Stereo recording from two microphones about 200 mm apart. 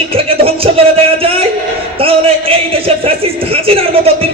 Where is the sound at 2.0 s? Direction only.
30° right (ahead or behind).